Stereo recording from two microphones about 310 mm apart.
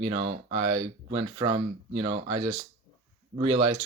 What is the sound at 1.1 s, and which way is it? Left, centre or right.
Speech, centre.